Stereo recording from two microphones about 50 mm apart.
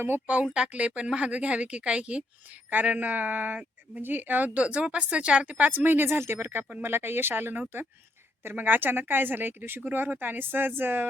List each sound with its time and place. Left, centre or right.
0.4 s a woman's voice: centre; by 11.0 s right